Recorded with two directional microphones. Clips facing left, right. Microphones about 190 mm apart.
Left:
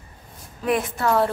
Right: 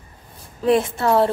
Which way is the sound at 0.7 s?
25° right (ahead or behind).